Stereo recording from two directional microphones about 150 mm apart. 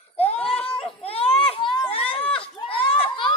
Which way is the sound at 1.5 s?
35° left (ahead or behind).